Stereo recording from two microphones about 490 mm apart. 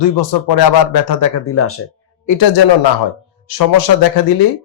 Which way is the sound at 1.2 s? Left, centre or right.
Left.